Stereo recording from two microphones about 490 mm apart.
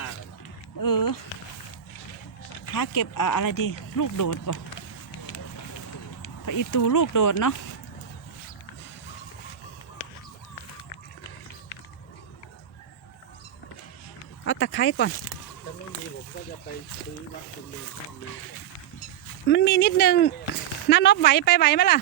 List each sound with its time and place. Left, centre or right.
0.8 s speech: left
2.7 s speech: left
6.4 s speech: left
14.4 s speech: left
19.5 s speech: centre